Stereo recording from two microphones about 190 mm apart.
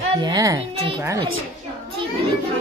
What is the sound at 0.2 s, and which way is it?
Speech, 20° right (ahead or behind).